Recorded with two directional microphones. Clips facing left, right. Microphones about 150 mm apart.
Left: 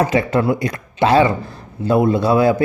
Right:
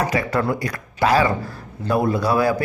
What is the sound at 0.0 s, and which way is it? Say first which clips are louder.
A man's voice: left 5 dB; 25° left (ahead or behind).